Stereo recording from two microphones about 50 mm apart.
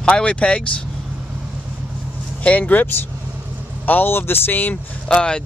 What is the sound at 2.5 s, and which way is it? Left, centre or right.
Speech, left.